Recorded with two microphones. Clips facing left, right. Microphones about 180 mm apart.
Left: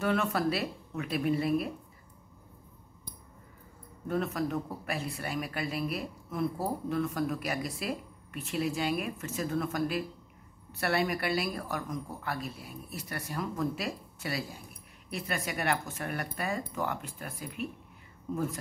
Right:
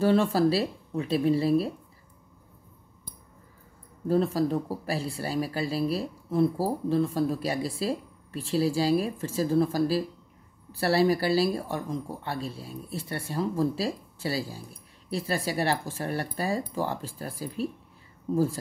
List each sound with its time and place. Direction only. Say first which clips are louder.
0.0 s speech: right 7 dB; 30° right (ahead or behind)
4.1 s speech: right 7 dB; 30° right (ahead or behind)